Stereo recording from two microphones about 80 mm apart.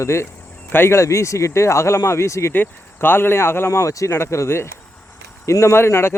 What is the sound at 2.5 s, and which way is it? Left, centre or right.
Speech, left.